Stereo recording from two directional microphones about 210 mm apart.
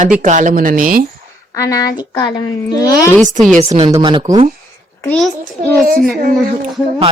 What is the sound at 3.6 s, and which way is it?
Speech, 30° right (ahead or behind).